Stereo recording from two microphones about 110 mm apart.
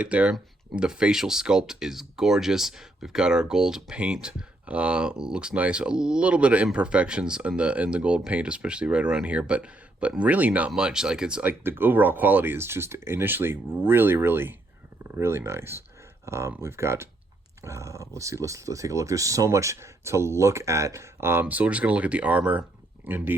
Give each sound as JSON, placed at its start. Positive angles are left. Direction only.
{"t": 0.0, "sound": "speech", "side_deg": -10}